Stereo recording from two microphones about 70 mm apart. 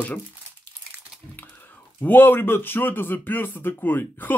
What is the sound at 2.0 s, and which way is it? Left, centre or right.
Speech, left.